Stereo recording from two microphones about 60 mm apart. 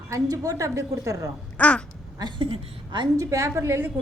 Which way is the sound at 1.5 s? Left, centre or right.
Left.